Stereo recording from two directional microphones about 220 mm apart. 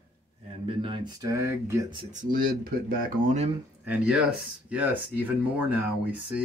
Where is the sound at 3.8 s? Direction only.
5° right (ahead or behind).